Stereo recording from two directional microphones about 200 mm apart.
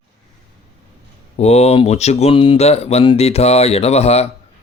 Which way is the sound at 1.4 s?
30° left (ahead or behind).